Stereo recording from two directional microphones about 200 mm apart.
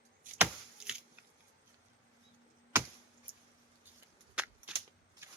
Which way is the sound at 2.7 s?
10° right (ahead or behind).